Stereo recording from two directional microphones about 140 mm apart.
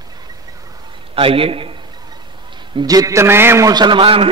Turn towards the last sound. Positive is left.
turn(degrees=-40)  # may be behind; listen again after turning